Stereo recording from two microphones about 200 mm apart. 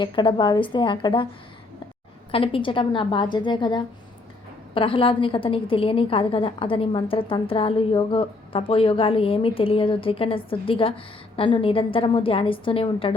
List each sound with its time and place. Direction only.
0.0 s a woman's voice: 25° left (ahead or behind)
2.3 s a woman's voice: 25° left (ahead or behind)